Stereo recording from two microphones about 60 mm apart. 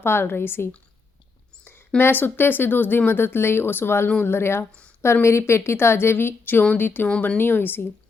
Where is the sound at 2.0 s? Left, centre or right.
Left.